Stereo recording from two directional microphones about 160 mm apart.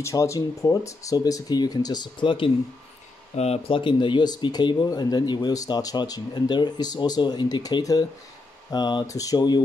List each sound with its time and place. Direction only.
0.0 s speech: 20° left (ahead or behind)